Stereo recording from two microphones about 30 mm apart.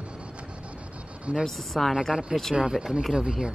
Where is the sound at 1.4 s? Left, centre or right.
Centre.